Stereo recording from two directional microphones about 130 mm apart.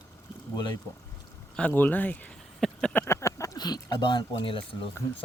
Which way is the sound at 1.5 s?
15° left (ahead or behind).